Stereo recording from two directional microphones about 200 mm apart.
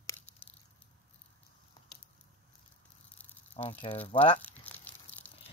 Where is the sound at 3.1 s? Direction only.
10° left (ahead or behind).